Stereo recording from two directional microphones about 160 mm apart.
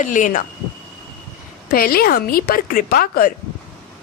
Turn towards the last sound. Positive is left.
turn(degrees=70)  # may be behind; listen again after turning